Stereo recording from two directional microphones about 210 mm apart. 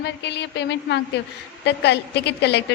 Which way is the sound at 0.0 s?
55° left (ahead or behind).